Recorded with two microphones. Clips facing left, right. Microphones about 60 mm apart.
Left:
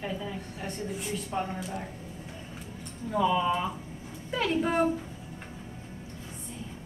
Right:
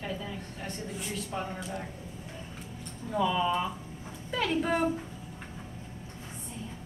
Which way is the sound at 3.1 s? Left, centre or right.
Centre.